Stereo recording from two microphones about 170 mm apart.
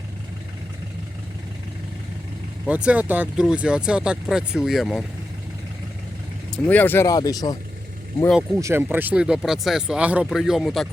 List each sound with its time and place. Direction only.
2.6 s speech: 10° right (ahead or behind)
6.5 s speech: 10° left (ahead or behind)
8.5 s speech: 15° right (ahead or behind); by 10.8 s centre (ahead or behind)